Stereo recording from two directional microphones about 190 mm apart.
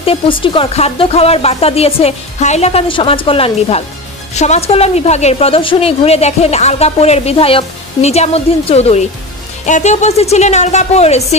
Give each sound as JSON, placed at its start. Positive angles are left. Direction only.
{"t": 0.0, "sound": "speech", "side_deg": 30}